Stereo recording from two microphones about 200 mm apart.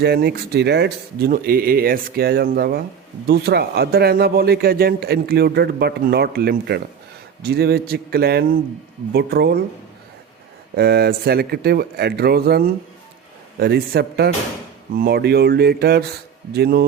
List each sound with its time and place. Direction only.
0.0 s speech: 55° right (ahead or behind)
10.8 s speech: 55° right (ahead or behind)